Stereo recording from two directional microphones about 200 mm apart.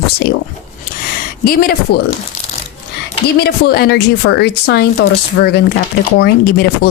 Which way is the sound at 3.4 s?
55° left (ahead or behind).